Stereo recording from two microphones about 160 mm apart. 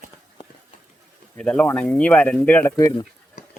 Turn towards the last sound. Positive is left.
turn(degrees=25)  # may be behind; listen again after turning